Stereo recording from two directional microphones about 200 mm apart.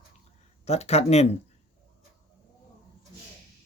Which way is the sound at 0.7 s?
30° left (ahead or behind).